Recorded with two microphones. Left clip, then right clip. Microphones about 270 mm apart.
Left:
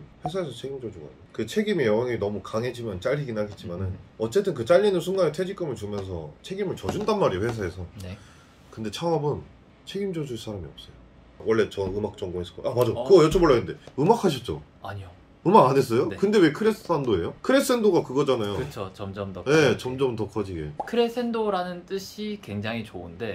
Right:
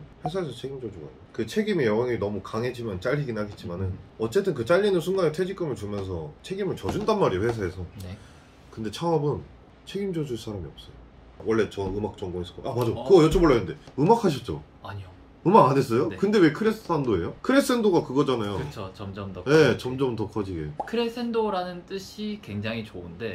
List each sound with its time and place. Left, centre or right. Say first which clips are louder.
0.2 s speech: even; centre
18.7 s speech: left 3 dB; centre
19.4 s speech: right 1 dB; centre
20.8 s speech: left 4 dB; centre